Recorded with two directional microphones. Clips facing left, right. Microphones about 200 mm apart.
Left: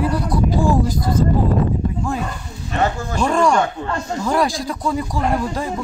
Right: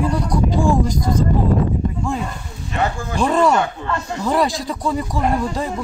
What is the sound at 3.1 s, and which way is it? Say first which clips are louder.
Speech: right 1 dB; 5° right (ahead or behind).